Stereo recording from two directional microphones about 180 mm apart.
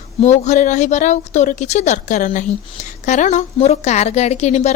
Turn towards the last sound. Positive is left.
turn(degrees=40)  # may be behind; listen again after turning